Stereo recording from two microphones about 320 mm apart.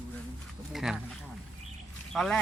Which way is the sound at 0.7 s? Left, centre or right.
Centre.